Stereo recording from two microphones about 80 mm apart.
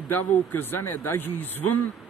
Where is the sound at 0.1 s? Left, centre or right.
Left.